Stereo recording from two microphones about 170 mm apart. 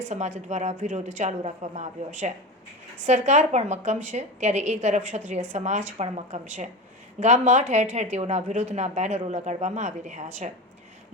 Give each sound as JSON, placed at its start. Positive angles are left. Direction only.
{"t": 0.1, "sound": "a woman's voice", "side_deg": -45}